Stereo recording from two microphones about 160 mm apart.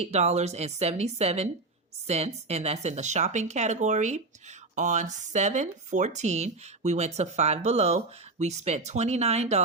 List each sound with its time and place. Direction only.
0.0 s speech: 45° right (ahead or behind)